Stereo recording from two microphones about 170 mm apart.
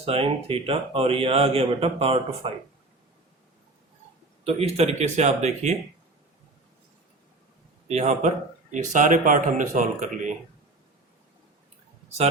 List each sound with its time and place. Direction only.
0.0 s a man's voice: 35° right (ahead or behind)
4.4 s a man's voice: 35° right (ahead or behind)
7.9 s a man's voice: 40° right (ahead or behind)